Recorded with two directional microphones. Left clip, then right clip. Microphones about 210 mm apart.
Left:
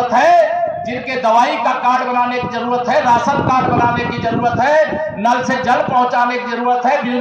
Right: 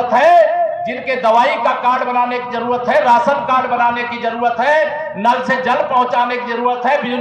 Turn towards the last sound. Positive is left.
turn(degrees=-40)  # may be behind; listen again after turning